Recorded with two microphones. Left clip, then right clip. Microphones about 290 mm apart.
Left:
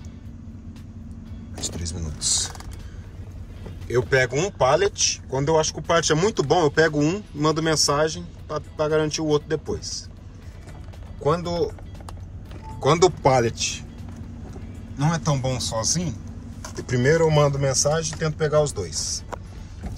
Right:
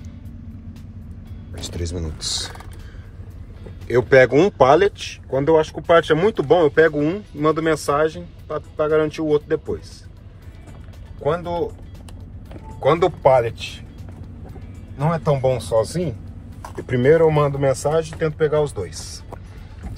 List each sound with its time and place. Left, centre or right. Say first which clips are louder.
1.6 s speech: right 3 dB; centre
3.8 s speech: right 7 dB; centre
11.2 s speech: right 1 dB; centre
12.8 s speech: right 3 dB; centre
15.0 s speech: right 5 dB; centre